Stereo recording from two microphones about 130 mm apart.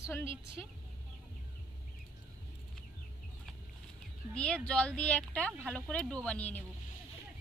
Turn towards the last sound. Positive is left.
turn(degrees=10)  # may be behind; listen again after turning